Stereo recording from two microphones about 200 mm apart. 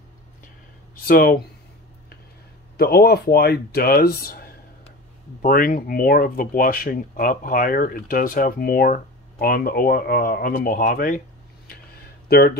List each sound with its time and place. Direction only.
1.0 s speech: 50° left (ahead or behind)
2.8 s speech: 50° left (ahead or behind)